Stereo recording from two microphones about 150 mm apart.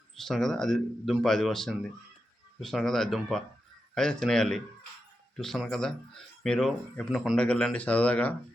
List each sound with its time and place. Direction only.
0.2 s speech: 5° left (ahead or behind)